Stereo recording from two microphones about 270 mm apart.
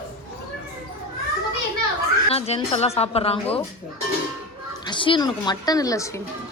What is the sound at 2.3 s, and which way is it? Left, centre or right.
A woman's voice, left.